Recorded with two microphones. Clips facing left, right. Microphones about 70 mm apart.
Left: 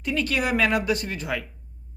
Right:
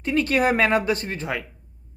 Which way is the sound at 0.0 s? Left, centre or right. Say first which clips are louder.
Right 5 dB; right.